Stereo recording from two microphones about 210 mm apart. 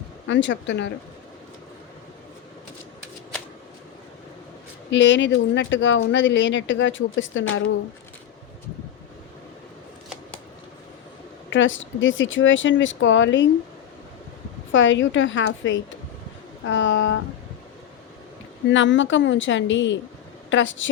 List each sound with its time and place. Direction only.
0.3 s speech: 60° left (ahead or behind)
4.9 s speech: 60° left (ahead or behind)
11.5 s speech: 65° left (ahead or behind)
14.7 s speech: 65° left (ahead or behind)
18.7 s speech: 60° left (ahead or behind)